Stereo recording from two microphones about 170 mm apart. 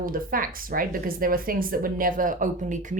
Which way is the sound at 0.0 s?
55° right (ahead or behind).